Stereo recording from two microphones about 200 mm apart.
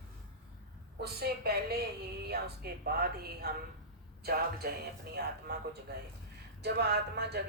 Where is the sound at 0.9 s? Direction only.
50° right (ahead or behind).